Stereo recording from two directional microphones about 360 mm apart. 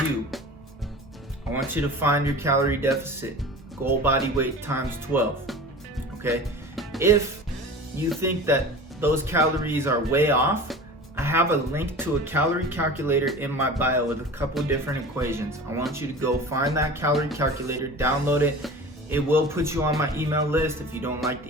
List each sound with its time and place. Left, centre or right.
1.7 s speech: centre
6.7 s music: centre
7.9 s speech: centre